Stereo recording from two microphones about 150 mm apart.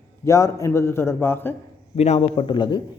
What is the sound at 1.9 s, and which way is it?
Speech, 45° left (ahead or behind).